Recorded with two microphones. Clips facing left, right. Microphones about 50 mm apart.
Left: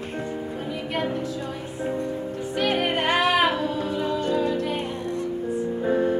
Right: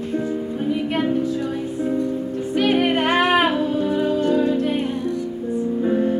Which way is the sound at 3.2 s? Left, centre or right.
Right.